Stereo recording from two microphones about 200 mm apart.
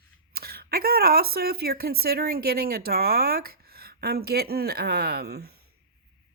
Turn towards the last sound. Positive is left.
turn(degrees=-50)  # may be behind; listen again after turning